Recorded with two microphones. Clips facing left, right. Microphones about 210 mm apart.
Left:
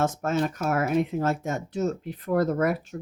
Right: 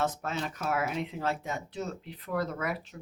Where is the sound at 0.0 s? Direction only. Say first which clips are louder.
Left 7 dB; 45° left (ahead or behind).